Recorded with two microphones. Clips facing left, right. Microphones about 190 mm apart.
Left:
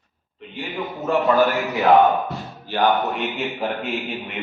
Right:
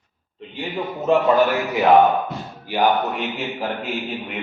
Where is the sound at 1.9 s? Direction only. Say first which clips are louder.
Even; centre (ahead or behind).